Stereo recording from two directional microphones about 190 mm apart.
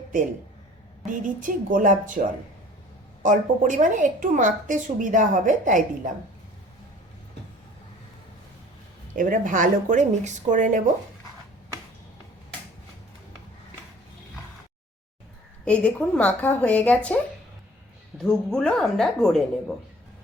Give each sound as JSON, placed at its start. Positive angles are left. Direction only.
{"t": 1.0, "sound": "a woman's voice", "side_deg": -45}
{"t": 3.2, "sound": "a woman's voice", "side_deg": -45}
{"t": 9.1, "sound": "a woman's voice", "side_deg": -45}
{"t": 15.6, "sound": "a woman's voice", "side_deg": 5}
{"t": 18.2, "sound": "a woman's voice", "side_deg": 5}